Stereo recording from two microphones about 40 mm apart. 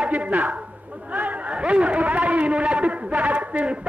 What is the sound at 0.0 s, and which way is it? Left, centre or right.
Speech, right.